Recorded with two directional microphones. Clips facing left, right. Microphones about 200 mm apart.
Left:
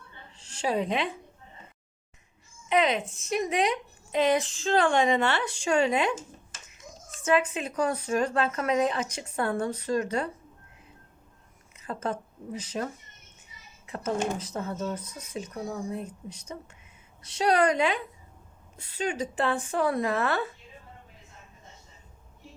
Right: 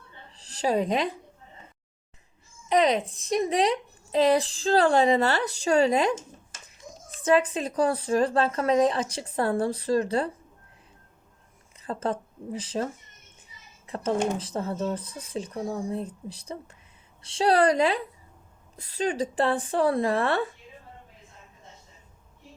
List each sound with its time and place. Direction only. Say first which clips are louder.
0.3 s speech: right 3 dB; 35° right (ahead or behind)
2.6 s speech: right 3 dB; 35° right (ahead or behind)
7.2 s speech: right 3 dB; 35° right (ahead or behind)
11.8 s a woman's voice: right 3 dB; 35° right (ahead or behind)